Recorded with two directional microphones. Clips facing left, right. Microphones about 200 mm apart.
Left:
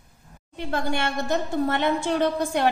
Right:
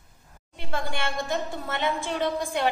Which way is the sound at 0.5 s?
45° left (ahead or behind).